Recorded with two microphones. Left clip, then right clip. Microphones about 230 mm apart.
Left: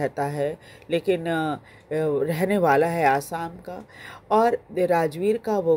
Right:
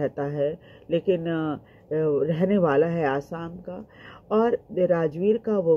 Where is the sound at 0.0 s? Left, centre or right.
Left.